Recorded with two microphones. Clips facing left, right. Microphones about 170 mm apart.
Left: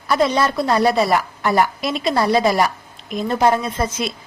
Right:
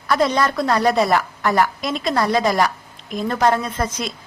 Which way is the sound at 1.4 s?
20° left (ahead or behind).